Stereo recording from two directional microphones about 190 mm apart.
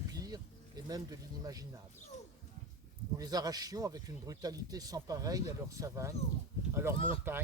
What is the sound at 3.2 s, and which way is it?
Speech, 20° right (ahead or behind).